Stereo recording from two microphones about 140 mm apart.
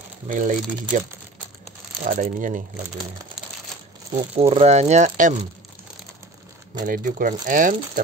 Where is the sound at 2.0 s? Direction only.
70° right (ahead or behind).